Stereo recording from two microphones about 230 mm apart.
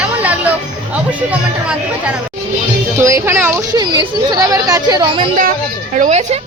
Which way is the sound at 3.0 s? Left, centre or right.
Centre.